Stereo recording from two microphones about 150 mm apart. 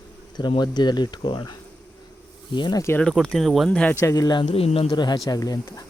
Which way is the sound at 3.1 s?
5° left (ahead or behind).